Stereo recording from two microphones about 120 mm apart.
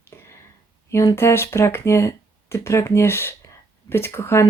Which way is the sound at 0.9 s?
25° left (ahead or behind).